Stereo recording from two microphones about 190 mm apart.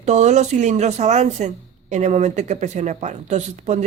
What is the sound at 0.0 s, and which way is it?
Speech, 35° right (ahead or behind).